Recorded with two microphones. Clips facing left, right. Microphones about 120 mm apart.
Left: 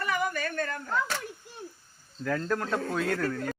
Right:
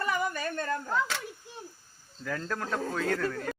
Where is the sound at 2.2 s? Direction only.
Centre (ahead or behind).